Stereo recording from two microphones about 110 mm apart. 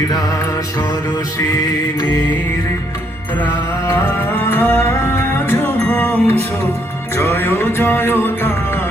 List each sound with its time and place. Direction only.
3.4 s music: 20° left (ahead or behind)